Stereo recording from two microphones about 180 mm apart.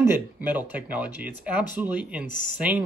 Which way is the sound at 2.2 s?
45° left (ahead or behind).